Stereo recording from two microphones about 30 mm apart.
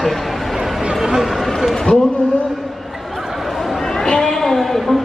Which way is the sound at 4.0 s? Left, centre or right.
Left.